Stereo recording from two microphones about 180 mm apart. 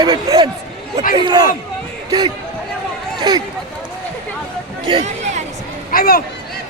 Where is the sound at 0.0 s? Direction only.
20° right (ahead or behind).